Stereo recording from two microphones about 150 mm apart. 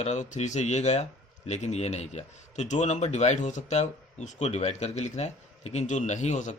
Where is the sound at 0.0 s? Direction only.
50° left (ahead or behind).